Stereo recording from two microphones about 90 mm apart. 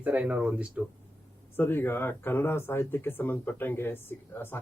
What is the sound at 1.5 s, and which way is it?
Speech, 25° left (ahead or behind).